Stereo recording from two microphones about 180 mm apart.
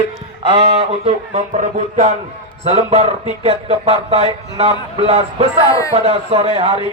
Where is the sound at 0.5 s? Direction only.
35° right (ahead or behind).